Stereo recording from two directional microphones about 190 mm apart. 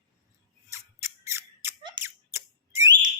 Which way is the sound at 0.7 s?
15° right (ahead or behind).